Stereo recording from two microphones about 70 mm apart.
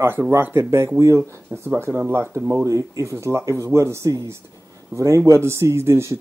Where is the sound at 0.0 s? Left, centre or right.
Right.